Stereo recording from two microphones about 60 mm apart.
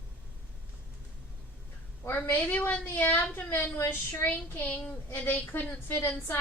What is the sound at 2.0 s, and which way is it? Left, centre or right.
A woman's voice, left.